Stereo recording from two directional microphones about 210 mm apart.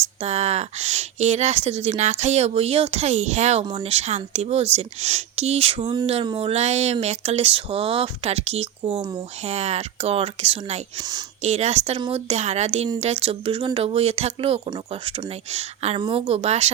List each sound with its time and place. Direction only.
0.0 s a woman's voice: 30° right (ahead or behind)